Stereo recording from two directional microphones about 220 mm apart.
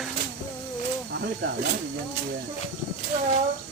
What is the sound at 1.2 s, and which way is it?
Snake, 50° right (ahead or behind).